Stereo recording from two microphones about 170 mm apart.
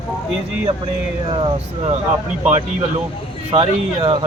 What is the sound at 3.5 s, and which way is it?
Speech, 35° right (ahead or behind).